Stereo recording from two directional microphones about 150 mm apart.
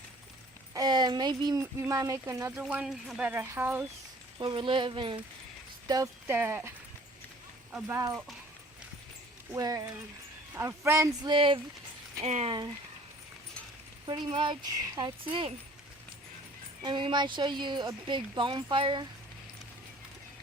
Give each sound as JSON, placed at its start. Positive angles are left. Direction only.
{"t": 0.7, "sound": "speech", "side_deg": -25}
{"t": 2.6, "sound": "speech", "side_deg": -5}
{"t": 4.4, "sound": "speech", "side_deg": -35}
{"t": 5.9, "sound": "speech", "side_deg": -25}
{"t": 6.3, "sound": "speech", "side_deg": -15}
{"t": 9.5, "sound": "speech", "side_deg": -20}
{"t": 11.3, "sound": "speech", "side_deg": -35}
{"t": 12.2, "sound": "speech", "side_deg": -45}
{"t": 14.3, "sound": "speech", "side_deg": -35}
{"t": 16.8, "sound": "speech", "side_deg": -30}